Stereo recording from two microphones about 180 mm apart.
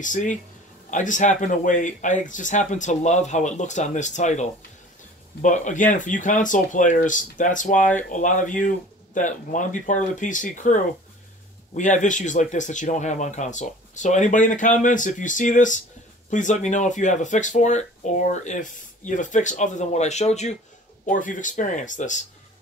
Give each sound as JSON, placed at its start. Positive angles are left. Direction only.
{"t": 0.0, "sound": "speech", "side_deg": 45}